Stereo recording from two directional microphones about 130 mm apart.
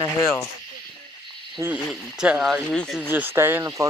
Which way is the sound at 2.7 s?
5° left (ahead or behind).